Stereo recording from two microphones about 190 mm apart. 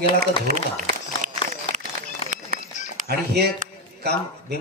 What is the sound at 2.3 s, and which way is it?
Run, 40° right (ahead or behind).